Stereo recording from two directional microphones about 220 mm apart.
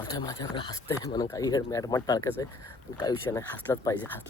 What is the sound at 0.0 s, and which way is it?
Speech, 15° left (ahead or behind).